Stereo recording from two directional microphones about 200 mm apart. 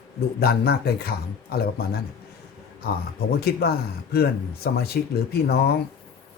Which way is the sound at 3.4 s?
50° left (ahead or behind).